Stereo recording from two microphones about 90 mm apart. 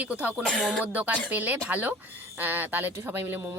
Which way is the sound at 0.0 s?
15° right (ahead or behind).